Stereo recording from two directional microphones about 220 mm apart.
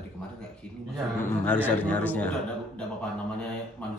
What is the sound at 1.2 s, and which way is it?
A man's voice, 10° left (ahead or behind).